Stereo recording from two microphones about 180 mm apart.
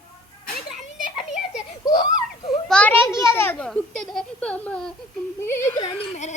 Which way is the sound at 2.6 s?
5° left (ahead or behind).